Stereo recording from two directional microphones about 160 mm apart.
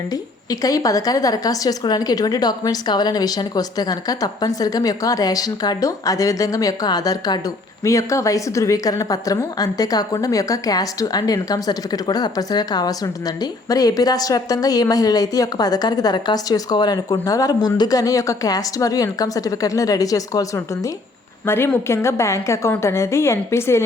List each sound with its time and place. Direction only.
0.6 s a woman's voice: 20° left (ahead or behind)
21.4 s a woman's voice: 15° left (ahead or behind)